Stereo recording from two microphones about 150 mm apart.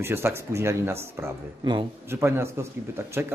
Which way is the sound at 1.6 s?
30° right (ahead or behind).